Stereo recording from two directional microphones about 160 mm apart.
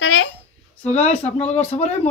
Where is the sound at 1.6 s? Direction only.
40° left (ahead or behind).